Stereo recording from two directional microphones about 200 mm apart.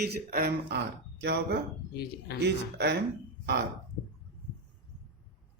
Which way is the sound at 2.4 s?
55° right (ahead or behind).